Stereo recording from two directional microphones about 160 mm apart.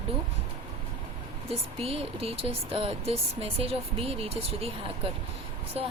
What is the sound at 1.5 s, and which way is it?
Speech, 35° right (ahead or behind).